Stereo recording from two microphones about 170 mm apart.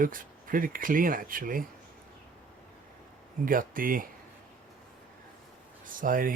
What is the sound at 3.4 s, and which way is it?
Speech, 55° right (ahead or behind).